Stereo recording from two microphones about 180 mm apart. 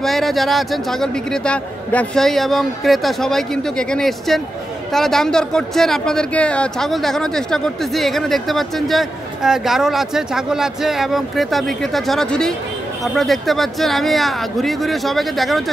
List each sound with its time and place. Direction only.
0.0 s speech: centre (ahead or behind)